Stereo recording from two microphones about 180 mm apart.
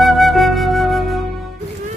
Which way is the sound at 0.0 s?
Centre (ahead or behind).